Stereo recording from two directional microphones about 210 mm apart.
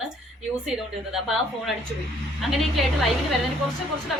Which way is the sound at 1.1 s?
Centre (ahead or behind).